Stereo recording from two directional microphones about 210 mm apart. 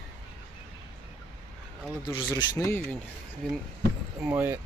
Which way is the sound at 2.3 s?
15° left (ahead or behind).